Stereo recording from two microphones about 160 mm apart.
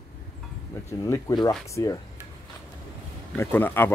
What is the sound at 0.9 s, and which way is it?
Speech, 20° left (ahead or behind).